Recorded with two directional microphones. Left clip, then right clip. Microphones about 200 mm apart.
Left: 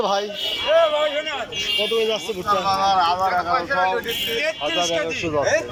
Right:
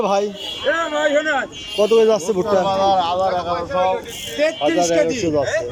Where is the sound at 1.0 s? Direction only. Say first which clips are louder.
Right 5 dB; 65° right (ahead or behind).